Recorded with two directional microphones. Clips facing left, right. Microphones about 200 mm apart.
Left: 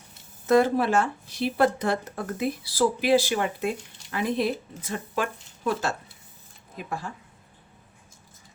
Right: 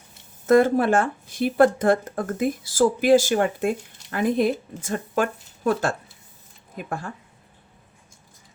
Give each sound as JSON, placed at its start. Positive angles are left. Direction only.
{"t": 0.4, "sound": "speech", "side_deg": -50}